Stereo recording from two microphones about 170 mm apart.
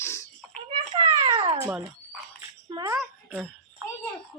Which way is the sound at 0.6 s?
35° right (ahead or behind).